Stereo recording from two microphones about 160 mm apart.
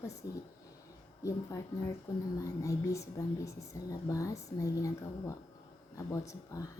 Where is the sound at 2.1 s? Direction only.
20° left (ahead or behind).